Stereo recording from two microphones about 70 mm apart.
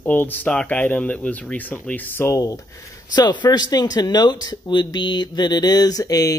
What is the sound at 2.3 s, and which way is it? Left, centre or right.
Speech, left.